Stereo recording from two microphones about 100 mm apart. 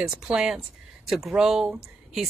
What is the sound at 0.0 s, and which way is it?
Speech, 5° right (ahead or behind).